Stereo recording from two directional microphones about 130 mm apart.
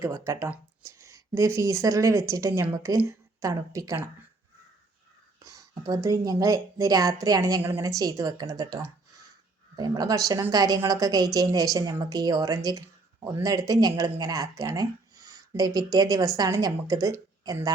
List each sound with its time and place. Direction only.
0.0 s a woman's voice: 20° right (ahead or behind)
5.4 s a woman's voice: 25° right (ahead or behind)